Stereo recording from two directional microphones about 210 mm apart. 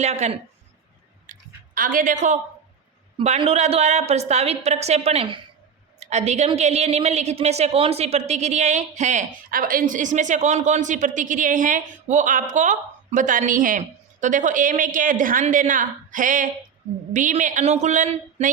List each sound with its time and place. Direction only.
0.0 s a woman's voice: 30° right (ahead or behind)
1.3 s a sound: 40° right (ahead or behind)
3.2 s a woman's voice: 25° right (ahead or behind)